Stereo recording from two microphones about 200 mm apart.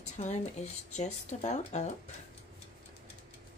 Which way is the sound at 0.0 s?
35° left (ahead or behind).